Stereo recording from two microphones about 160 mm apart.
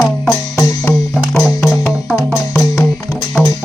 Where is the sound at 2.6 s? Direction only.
20° left (ahead or behind).